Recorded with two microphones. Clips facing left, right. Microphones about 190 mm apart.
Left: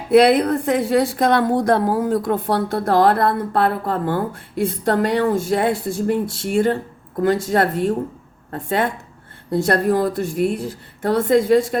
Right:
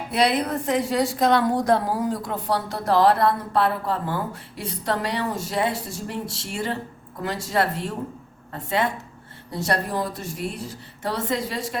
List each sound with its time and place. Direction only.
0.1 s a woman's voice: 55° left (ahead or behind)